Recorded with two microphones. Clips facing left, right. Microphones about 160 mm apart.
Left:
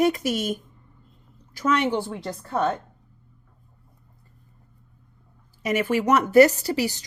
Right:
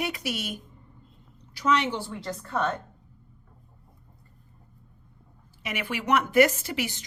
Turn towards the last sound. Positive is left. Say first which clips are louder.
# left 6 dB
turn(degrees=35)  # may be behind; listen again after turning